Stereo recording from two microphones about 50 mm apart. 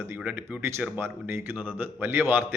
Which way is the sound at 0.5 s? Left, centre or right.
Right.